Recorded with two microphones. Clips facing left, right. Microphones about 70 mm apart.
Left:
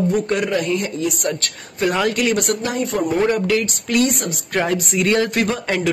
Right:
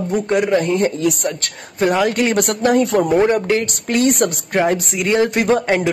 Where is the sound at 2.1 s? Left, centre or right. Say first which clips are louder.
Right 2 dB; right.